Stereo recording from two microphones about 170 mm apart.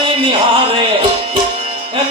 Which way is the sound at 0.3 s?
30° right (ahead or behind).